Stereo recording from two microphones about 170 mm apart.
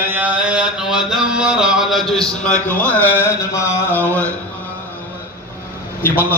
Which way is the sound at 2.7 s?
10° left (ahead or behind).